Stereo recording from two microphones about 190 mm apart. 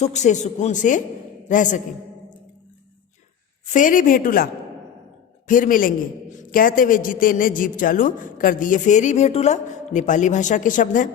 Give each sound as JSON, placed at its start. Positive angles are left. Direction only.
{"t": 0.0, "sound": "a man's voice", "side_deg": 35}
{"t": 3.7, "sound": "a man's voice", "side_deg": 45}
{"t": 5.5, "sound": "a man's voice", "side_deg": 45}